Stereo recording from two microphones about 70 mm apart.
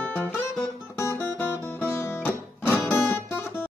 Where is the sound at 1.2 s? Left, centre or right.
Left.